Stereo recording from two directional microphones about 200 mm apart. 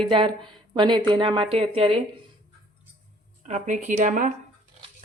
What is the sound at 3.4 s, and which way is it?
Speech, 40° right (ahead or behind).